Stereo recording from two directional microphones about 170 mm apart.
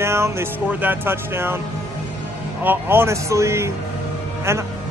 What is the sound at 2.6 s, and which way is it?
Speech, 15° right (ahead or behind).